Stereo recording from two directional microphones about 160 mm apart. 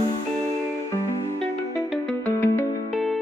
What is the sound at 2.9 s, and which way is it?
Music, centre (ahead or behind).